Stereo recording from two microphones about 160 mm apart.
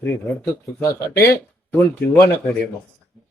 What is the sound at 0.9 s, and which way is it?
Speech, 20° left (ahead or behind).